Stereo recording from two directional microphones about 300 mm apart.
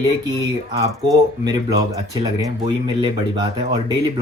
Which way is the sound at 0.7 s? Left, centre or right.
Centre.